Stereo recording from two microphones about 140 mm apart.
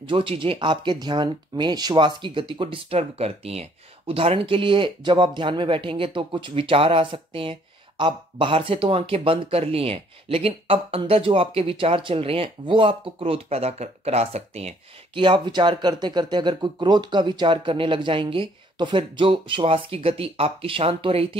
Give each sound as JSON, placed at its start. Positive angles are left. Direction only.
{"t": 0.0, "sound": "speech", "side_deg": -35}